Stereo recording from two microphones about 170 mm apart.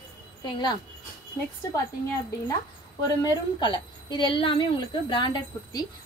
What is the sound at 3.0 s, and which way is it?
A woman's voice, 25° left (ahead or behind).